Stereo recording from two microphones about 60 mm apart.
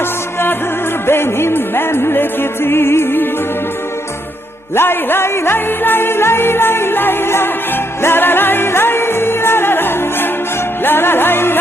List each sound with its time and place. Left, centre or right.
1.0 s music: left
4.7 s music: left